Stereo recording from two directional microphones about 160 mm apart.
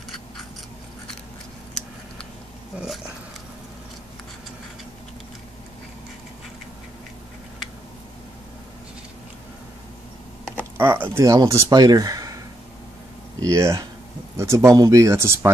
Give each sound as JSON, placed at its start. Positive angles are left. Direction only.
{"t": 10.8, "sound": "speech", "side_deg": -15}
{"t": 13.4, "sound": "speech", "side_deg": -20}